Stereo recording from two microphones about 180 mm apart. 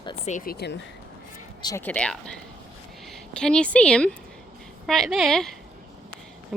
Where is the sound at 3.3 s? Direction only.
5° left (ahead or behind).